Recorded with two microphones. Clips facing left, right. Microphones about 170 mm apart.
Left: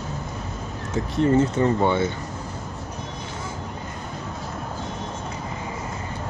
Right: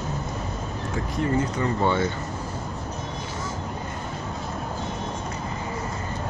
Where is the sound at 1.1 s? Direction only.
30° left (ahead or behind).